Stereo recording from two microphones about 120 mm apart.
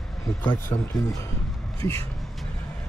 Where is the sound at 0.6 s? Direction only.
20° left (ahead or behind).